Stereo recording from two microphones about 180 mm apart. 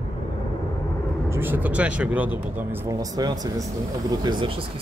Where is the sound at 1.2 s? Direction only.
15° right (ahead or behind).